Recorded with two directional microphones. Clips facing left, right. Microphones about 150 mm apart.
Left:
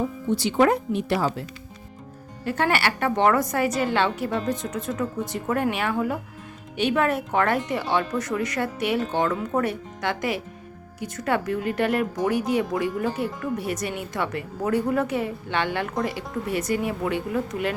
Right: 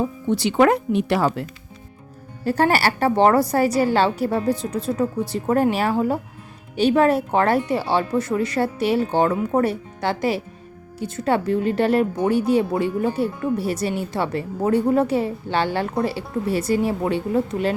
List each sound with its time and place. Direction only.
0.3 s speech: 70° right (ahead or behind)
2.4 s a woman's voice: 35° right (ahead or behind)
9.3 s speech: 20° right (ahead or behind)
9.6 s a woman's voice: 30° right (ahead or behind)